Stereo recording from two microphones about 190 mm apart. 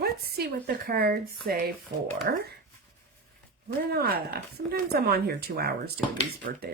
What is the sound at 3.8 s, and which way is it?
Speech, 55° right (ahead or behind).